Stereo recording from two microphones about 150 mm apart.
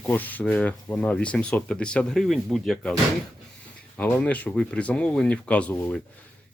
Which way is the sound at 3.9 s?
10° left (ahead or behind).